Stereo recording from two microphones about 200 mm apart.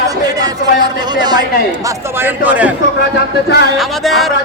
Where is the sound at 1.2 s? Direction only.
20° right (ahead or behind).